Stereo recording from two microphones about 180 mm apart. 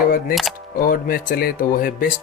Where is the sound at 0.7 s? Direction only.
50° left (ahead or behind).